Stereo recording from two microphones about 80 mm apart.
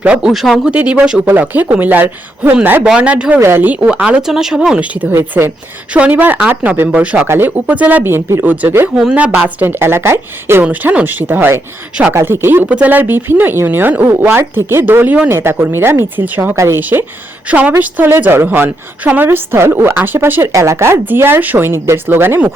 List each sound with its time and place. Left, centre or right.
0.0 s a woman's voice: centre
2.8 s speech: centre
3.4 s speech: right
3.7 s speech: centre
5.4 s a woman's voice: right
9.0 s a woman's voice: centre; by 10.6 s right
10.6 s a woman's voice: centre
12.6 s a woman's voice: centre
17.5 s a woman's voice: right
20.5 s speech: right